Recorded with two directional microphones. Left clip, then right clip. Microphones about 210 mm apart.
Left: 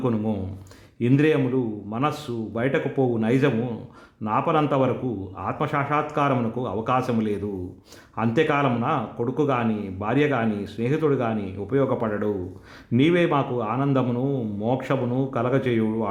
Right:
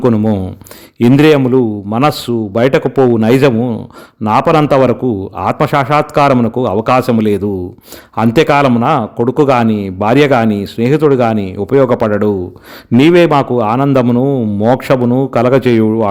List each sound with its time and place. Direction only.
0.0 s a man's voice: 40° right (ahead or behind)